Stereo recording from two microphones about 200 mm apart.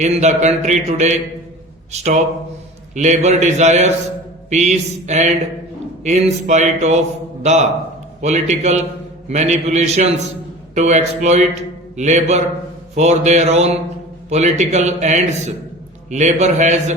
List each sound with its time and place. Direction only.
0.0 s a man's voice: 35° right (ahead or behind)